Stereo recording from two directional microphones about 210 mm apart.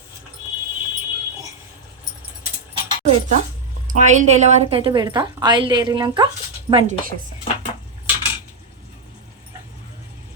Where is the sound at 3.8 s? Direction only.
35° right (ahead or behind).